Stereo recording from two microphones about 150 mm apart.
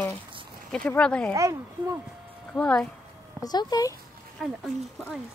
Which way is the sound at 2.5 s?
10° left (ahead or behind).